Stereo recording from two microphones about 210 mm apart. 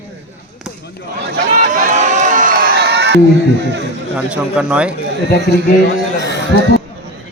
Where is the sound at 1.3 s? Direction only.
40° right (ahead or behind); by 3.8 s 55° right (ahead or behind).